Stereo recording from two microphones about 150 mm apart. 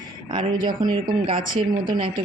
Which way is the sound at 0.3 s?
30° right (ahead or behind).